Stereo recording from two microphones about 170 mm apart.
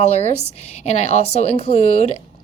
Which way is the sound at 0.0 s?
40° left (ahead or behind).